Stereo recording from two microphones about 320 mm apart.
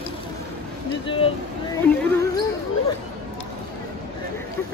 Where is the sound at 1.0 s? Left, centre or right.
Centre.